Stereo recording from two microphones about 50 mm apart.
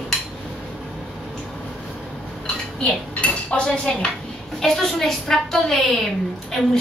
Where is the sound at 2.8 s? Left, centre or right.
Left.